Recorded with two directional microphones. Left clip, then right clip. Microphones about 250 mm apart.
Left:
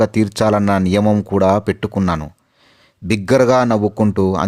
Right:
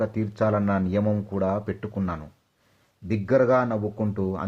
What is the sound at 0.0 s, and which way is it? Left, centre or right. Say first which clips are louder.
Speech: left 10 dB; left.